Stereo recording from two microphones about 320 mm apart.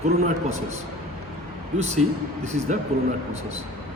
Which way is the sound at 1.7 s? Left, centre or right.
Right.